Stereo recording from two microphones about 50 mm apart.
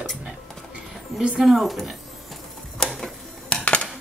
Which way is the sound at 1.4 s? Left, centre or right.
Centre.